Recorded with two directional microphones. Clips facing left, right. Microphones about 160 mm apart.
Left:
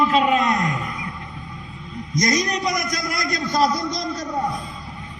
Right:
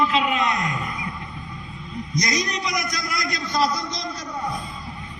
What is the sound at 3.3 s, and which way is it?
Speech, 50° left (ahead or behind).